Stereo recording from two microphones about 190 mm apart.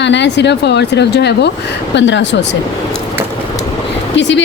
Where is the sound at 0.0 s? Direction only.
70° left (ahead or behind).